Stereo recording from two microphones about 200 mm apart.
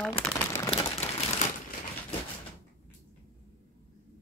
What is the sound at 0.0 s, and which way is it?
Crumpling, 5° left (ahead or behind).